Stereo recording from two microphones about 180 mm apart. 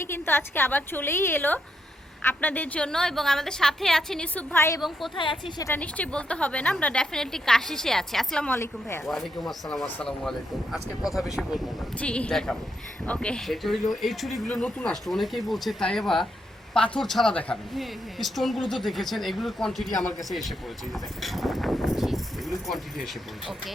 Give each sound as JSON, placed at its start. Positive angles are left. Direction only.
{"t": 0.0, "sound": "a woman's voice", "side_deg": 10}
{"t": 4.8, "sound": "a woman's voice", "side_deg": 0}
{"t": 5.1, "sound": "speech", "side_deg": 25}
{"t": 5.6, "sound": "a woman's voice", "side_deg": 10}
{"t": 9.0, "sound": "a woman's voice", "side_deg": 0}